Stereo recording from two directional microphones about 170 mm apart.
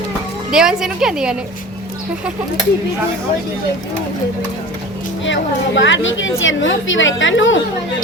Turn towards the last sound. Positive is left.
turn(degrees=90)